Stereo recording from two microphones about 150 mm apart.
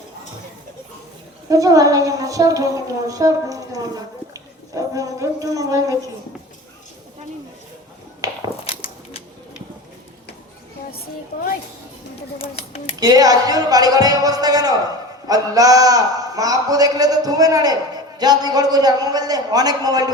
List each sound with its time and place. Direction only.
1.5 s a man's voice: 25° right (ahead or behind)
12.4 s speech: 40° left (ahead or behind)
13.0 s a man's voice: 25° right (ahead or behind)